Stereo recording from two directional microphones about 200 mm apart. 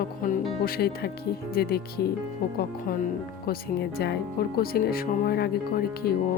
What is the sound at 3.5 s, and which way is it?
Speech, 55° left (ahead or behind).